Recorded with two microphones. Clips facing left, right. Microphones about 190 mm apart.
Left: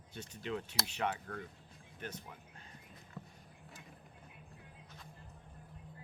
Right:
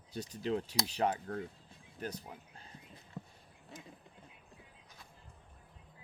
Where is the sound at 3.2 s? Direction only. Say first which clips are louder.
Right 3 dB; 20° right (ahead or behind).